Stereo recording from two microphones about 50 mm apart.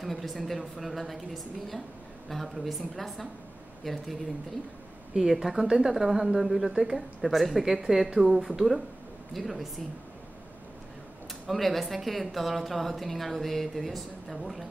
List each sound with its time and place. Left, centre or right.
0.0 s a woman's voice: centre
11.4 s a woman's voice: centre